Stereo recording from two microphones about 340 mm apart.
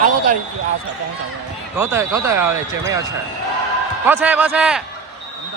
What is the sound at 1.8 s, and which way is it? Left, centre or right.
Speech, centre.